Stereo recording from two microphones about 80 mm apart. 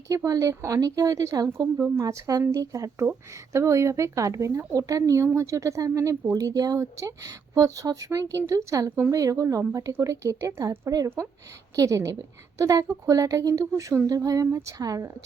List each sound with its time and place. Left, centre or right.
0.1 s speech: right
6.3 s speech: right